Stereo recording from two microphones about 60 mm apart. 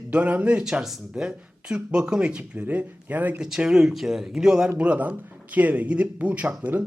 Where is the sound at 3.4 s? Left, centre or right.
Centre.